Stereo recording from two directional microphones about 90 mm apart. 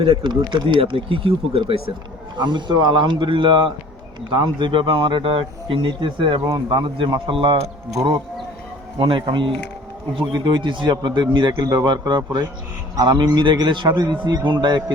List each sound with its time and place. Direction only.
0.0 s speech: 90° right
0.3 s speech: 60° right (ahead or behind); by 1.8 s 85° right
2.4 s a man's voice: 60° right (ahead or behind)
9.0 s speech: 70° right (ahead or behind)
10.3 s a man's voice: 55° right (ahead or behind)